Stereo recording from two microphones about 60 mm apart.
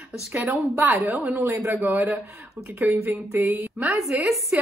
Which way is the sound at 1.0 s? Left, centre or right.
Right.